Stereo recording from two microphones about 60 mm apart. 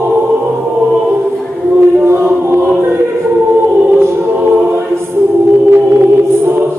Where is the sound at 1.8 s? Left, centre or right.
Right.